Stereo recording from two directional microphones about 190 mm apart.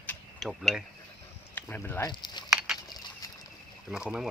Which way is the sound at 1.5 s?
10° left (ahead or behind).